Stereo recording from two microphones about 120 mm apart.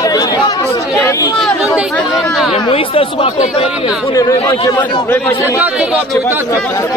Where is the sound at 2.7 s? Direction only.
50° left (ahead or behind).